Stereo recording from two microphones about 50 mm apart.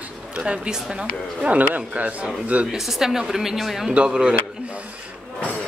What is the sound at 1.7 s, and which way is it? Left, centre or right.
Speech, right.